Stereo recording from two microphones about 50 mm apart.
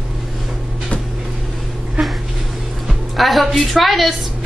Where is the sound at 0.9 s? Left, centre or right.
Left.